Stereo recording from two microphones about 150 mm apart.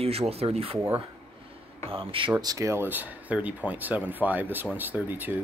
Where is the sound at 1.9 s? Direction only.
35° right (ahead or behind).